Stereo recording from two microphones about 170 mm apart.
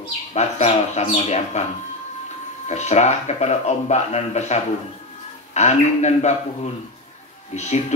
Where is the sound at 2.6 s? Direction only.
40° left (ahead or behind).